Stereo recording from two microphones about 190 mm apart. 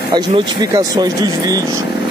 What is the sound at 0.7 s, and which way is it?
Speech, 20° right (ahead or behind).